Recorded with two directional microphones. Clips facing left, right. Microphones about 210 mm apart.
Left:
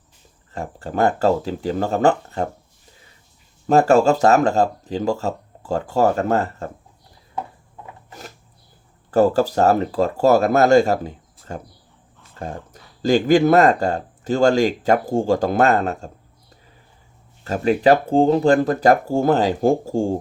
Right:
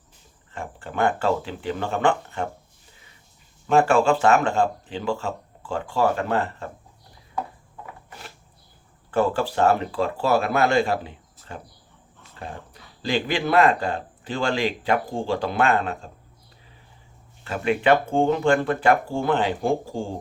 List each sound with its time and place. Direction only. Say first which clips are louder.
0.5 s speech: left 5 dB; 40° left (ahead or behind)
3.7 s speech: left 4 dB; 40° left (ahead or behind)
9.0 s speech: left 6 dB; 40° left (ahead or behind)
17.4 s speech: left 5 dB; 40° left (ahead or behind)